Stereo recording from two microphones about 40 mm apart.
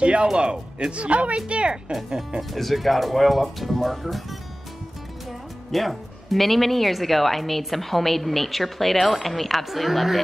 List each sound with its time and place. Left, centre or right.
0.0 s speech: right
2.5 s speech: centre
5.7 s speech: centre